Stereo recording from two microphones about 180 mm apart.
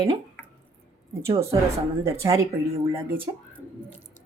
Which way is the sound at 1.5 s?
25° right (ahead or behind).